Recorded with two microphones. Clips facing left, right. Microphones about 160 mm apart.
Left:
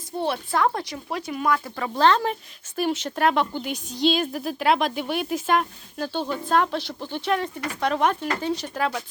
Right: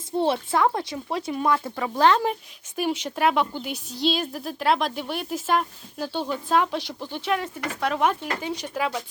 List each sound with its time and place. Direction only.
0.2 s speech: 25° right (ahead or behind)
1.8 s speech: 10° right (ahead or behind)